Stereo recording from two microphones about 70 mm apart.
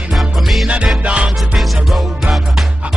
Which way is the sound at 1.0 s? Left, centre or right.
Centre.